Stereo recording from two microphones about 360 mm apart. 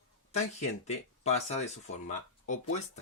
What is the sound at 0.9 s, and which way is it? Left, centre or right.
Speech, centre.